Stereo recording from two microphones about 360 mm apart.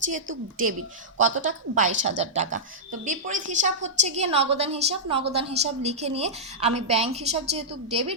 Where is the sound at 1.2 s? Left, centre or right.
Centre.